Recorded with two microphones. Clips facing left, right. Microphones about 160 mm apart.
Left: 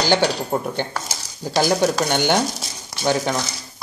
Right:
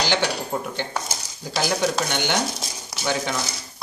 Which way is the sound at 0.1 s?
40° left (ahead or behind).